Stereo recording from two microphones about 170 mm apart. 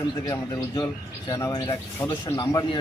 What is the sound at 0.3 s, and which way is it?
Speech, 20° left (ahead or behind).